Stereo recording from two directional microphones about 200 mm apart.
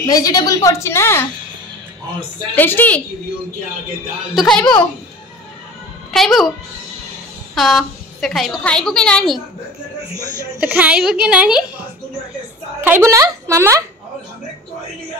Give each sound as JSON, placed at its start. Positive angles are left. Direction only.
{"t": 0.0, "sound": "a woman's voice", "side_deg": 20}
{"t": 2.5, "sound": "a woman's voice", "side_deg": 10}
{"t": 4.4, "sound": "a woman's voice", "side_deg": 5}
{"t": 6.1, "sound": "speech", "side_deg": 0}
{"t": 7.5, "sound": "a woman's voice", "side_deg": 0}
{"t": 10.6, "sound": "a woman's voice", "side_deg": -5}
{"t": 12.8, "sound": "speech", "side_deg": -10}